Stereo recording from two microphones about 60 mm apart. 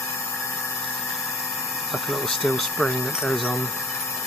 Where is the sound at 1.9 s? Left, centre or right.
Centre.